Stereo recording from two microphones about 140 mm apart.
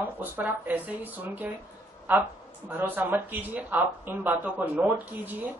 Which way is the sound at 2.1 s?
15° right (ahead or behind).